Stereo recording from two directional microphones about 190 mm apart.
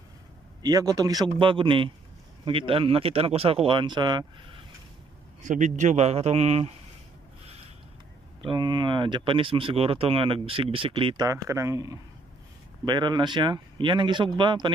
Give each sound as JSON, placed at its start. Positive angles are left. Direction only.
{"t": 0.6, "sound": "speech", "side_deg": -20}
{"t": 5.4, "sound": "a man's voice", "side_deg": -40}
{"t": 8.5, "sound": "speech", "side_deg": -25}